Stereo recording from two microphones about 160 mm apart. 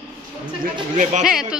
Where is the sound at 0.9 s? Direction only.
50° right (ahead or behind).